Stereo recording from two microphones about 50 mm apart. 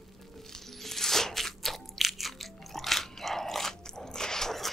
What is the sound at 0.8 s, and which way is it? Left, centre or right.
Crunch, centre.